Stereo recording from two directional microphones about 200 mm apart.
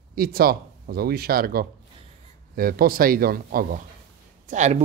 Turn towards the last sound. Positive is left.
turn(degrees=-35)  # may be behind; listen again after turning